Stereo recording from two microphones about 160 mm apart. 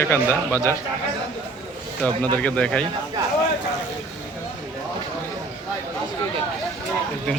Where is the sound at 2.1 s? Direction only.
25° right (ahead or behind).